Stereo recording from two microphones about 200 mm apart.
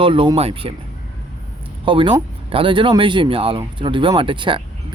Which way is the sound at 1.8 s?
25° right (ahead or behind).